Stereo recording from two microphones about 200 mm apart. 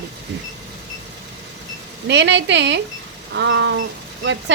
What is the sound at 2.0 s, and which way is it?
Speech, 60° right (ahead or behind).